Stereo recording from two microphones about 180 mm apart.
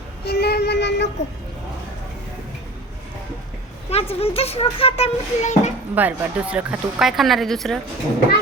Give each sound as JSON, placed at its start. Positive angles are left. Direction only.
{"t": 0.3, "sound": "a sound", "side_deg": 60}
{"t": 3.8, "sound": "speech", "side_deg": 35}
{"t": 5.9, "sound": "speech", "side_deg": -10}